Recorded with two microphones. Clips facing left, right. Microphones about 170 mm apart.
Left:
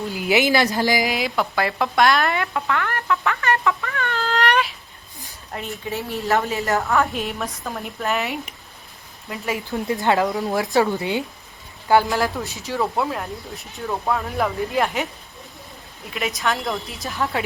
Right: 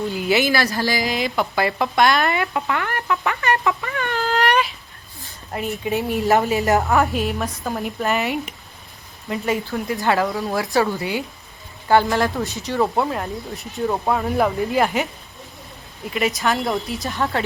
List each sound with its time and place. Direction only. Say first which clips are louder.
0.1 s speech: left 2 dB; 15° left (ahead or behind)
1.1 s speech: right 1 dB; centre (ahead or behind)
2.5 s a sound: even; 15° right (ahead or behind)
4.4 s a sound: right 1 dB; centre (ahead or behind)
5.8 s a woman's voice: right 6 dB; 15° right (ahead or behind)
7.1 s speech: right 4 dB; centre (ahead or behind)
9.6 s speech: even; 20° left (ahead or behind)
11.9 s speech: right 1 dB; 5° left (ahead or behind)
13.7 s a woman's voice: right 3 dB; 20° right (ahead or behind)
14.3 s speech: right 4 dB; centre (ahead or behind)
16.1 s speech: right 3 dB; centre (ahead or behind)